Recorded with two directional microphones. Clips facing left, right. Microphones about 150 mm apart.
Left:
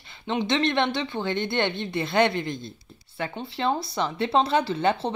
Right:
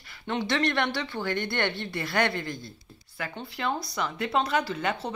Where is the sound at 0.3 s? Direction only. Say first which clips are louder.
Left 3 dB; 20° left (ahead or behind).